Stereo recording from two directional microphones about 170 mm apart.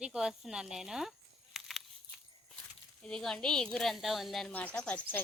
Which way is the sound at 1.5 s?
Centre (ahead or behind).